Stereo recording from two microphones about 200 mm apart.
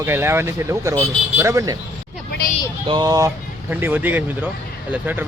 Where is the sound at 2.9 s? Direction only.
20° right (ahead or behind).